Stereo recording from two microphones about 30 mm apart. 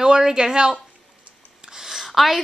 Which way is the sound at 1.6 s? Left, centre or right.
Centre.